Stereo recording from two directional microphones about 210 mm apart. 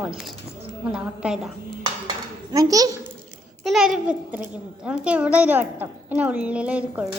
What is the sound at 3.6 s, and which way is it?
A child's voice, centre (ahead or behind).